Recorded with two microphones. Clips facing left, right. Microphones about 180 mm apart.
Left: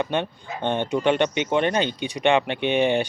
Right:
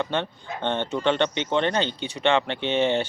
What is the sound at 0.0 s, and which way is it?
Speech, 15° left (ahead or behind).